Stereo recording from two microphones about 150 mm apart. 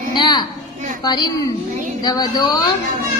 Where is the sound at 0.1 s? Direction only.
30° left (ahead or behind).